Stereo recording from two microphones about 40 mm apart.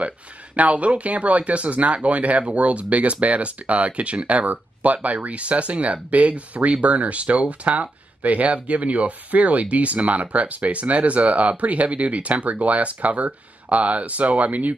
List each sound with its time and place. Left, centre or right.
0.6 s speech: right